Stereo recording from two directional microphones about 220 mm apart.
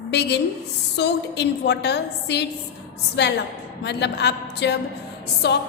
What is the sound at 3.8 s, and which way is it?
A woman's voice, 50° left (ahead or behind).